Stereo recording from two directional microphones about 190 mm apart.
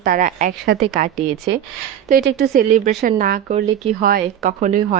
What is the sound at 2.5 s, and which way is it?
Speech, 40° right (ahead or behind).